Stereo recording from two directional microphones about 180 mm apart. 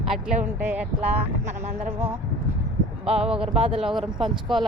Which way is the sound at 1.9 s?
10° right (ahead or behind).